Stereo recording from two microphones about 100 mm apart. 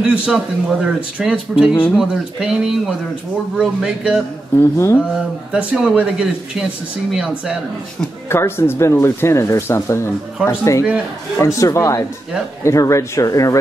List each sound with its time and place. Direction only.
0.0 s speech: 10° right (ahead or behind)
4.6 s speech: 25° left (ahead or behind)
5.1 s speech: 10° right (ahead or behind)
8.3 s speech: 25° left (ahead or behind)